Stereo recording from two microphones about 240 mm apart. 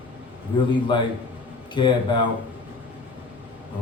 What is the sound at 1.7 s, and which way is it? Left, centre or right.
Speech, centre.